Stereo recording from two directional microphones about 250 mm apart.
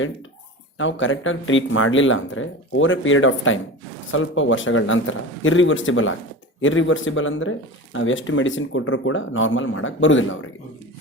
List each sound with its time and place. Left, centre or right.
0.8 s speech: left